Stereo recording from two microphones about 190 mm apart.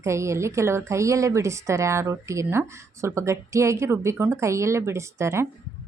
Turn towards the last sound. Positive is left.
turn(degrees=-15)  # may be behind; listen again after turning